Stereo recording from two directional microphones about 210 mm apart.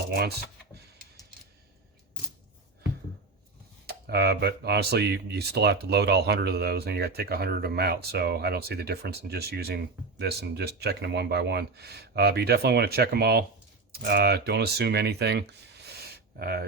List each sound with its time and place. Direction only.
0.1 s computer keyboard: 50° right (ahead or behind)
3.8 s speech: 50° right (ahead or behind)